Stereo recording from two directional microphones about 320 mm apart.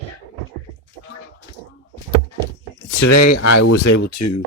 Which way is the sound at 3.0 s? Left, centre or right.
Left.